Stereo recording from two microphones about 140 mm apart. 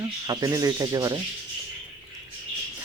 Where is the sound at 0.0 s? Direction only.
30° right (ahead or behind).